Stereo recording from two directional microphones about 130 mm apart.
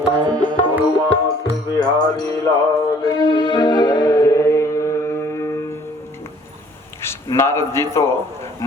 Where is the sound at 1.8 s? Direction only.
30° left (ahead or behind).